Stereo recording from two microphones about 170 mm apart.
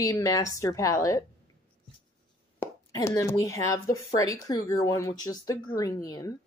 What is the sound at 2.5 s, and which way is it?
Plop, 20° left (ahead or behind).